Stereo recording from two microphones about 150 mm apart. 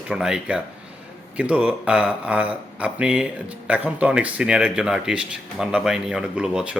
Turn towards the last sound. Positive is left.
turn(degrees=-5)  # may be behind; listen again after turning